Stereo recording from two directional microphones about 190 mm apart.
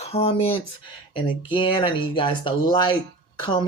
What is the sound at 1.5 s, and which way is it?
Speech, 25° left (ahead or behind).